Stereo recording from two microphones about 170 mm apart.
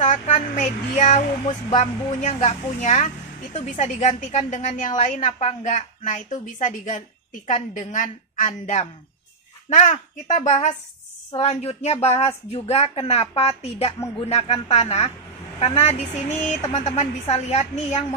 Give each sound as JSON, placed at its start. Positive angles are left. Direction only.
{"t": 0.0, "sound": "a woman's voice", "side_deg": 45}